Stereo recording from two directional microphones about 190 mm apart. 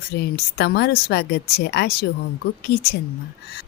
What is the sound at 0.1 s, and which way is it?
A woman's voice, 60° left (ahead or behind).